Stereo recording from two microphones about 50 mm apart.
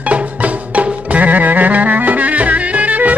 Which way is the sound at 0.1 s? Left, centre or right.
Right.